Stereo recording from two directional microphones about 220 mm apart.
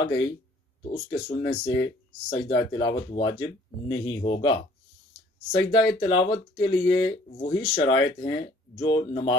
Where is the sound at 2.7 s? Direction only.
20° left (ahead or behind).